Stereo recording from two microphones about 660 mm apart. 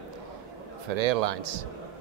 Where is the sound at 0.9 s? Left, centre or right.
Right.